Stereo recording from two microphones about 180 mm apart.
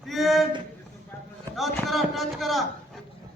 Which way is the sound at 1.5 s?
Centre (ahead or behind).